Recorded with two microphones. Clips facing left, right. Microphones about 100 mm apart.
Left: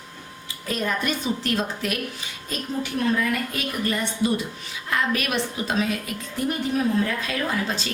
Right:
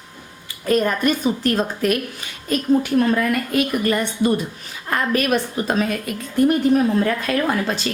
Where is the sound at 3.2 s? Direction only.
55° right (ahead or behind).